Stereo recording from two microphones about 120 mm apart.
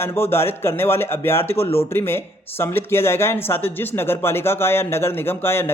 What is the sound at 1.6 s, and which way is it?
Speech, 55° left (ahead or behind).